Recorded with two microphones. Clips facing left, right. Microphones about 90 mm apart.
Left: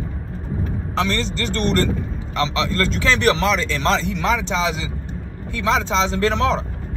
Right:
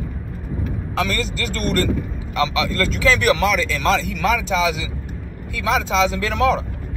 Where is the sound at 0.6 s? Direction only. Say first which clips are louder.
Left 1 dB; 30° left (ahead or behind).